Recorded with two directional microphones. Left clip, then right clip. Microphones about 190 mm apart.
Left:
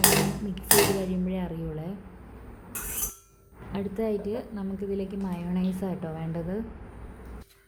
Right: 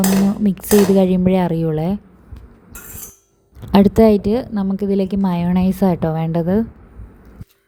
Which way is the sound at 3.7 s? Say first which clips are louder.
Right 18 dB; 60° right (ahead or behind).